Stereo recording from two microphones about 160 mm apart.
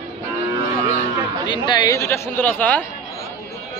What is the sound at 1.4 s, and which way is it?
A man's voice, 30° left (ahead or behind).